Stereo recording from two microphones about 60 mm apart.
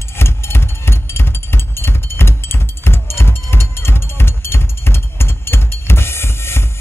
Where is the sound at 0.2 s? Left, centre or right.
Left.